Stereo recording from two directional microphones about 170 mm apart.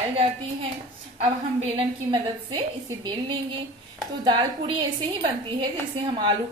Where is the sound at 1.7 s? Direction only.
25° right (ahead or behind).